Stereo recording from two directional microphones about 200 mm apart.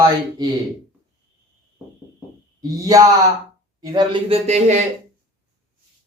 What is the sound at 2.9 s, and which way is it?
A man's voice, 20° right (ahead or behind).